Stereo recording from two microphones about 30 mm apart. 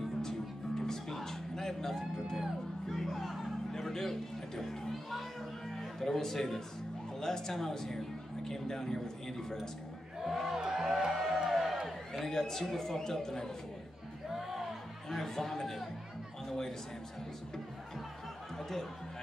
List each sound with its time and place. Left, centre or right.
0.2 s music: centre
7.2 s a man's voice: centre
10.2 s speech: centre
12.3 s a man's voice: centre
14.3 s music: centre
15.0 s a man's voice: centre
18.6 s chatter: centre